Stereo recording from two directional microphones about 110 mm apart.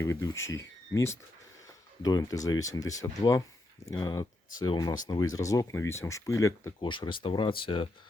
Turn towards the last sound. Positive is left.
turn(degrees=50)  # may be behind; listen again after turning